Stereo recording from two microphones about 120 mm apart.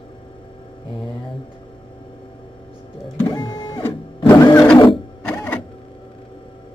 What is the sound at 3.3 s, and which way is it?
Printer, 35° left (ahead or behind).